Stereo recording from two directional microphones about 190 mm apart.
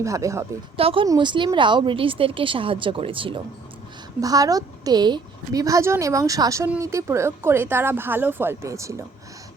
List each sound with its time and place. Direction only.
0.0 s a woman's voice: 15° right (ahead or behind)
0.8 s a woman's voice: 30° right (ahead or behind)